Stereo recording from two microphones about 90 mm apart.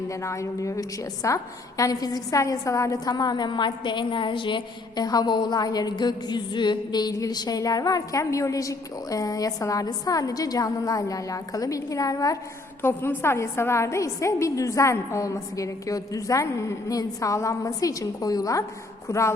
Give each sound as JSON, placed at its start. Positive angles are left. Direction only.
{"t": 0.1, "sound": "a woman's voice", "side_deg": 35}
{"t": 12.8, "sound": "a woman's voice", "side_deg": 25}